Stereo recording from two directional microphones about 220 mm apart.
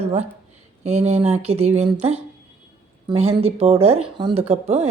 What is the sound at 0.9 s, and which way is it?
Speech, 30° right (ahead or behind).